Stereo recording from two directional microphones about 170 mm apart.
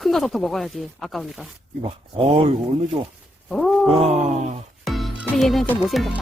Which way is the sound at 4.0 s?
40° right (ahead or behind).